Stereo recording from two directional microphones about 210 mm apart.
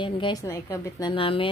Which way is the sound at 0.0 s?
20° left (ahead or behind).